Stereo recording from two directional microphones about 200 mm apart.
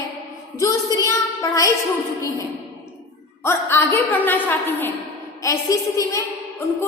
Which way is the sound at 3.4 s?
10° left (ahead or behind).